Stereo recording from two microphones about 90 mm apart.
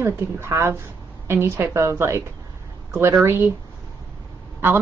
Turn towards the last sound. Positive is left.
turn(degrees=-25)  # may be behind; listen again after turning